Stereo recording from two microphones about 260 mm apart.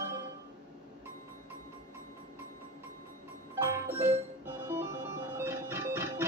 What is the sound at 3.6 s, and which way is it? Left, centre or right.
Music, centre.